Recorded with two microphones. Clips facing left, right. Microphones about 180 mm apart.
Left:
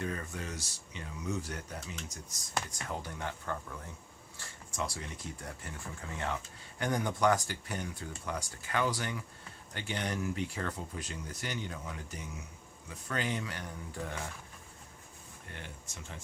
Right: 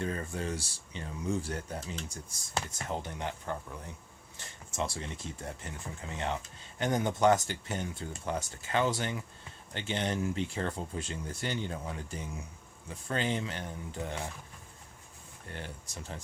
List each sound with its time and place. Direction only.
0.0 s speech: 30° right (ahead or behind)
15.5 s speech: 35° right (ahead or behind)